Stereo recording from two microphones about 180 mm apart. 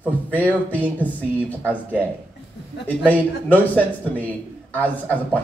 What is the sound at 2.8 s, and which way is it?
A man's voice, 10° left (ahead or behind).